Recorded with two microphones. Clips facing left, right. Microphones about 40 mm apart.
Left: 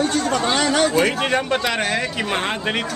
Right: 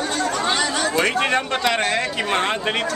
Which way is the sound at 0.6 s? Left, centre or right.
Left.